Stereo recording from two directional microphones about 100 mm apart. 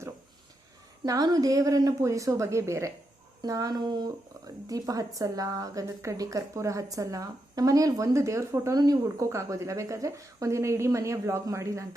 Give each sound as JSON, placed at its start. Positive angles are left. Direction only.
{"t": 1.0, "sound": "speech", "side_deg": -40}